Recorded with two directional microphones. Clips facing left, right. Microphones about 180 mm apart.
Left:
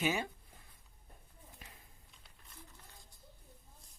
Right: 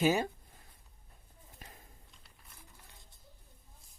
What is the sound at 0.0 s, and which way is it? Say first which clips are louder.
Speech: right 6 dB; 40° right (ahead or behind).